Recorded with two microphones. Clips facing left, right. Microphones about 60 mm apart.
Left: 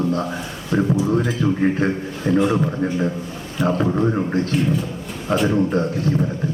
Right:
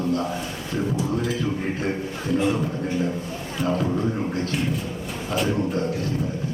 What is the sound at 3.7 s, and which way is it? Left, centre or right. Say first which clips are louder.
Speech: left 4 dB; left.